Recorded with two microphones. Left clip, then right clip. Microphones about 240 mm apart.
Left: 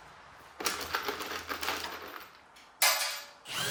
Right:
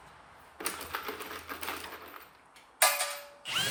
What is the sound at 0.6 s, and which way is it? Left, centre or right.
Sewing machine, left.